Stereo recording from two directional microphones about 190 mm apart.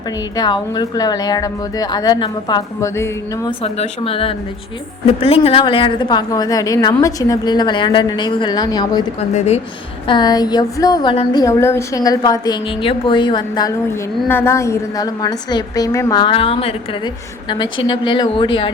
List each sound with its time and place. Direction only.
0.3 s speech: 20° left (ahead or behind)
3.6 s speech: 30° left (ahead or behind)
9.3 s a woman's voice: 35° left (ahead or behind)
10.1 s speech: 20° left (ahead or behind)
14.3 s speech: 10° left (ahead or behind)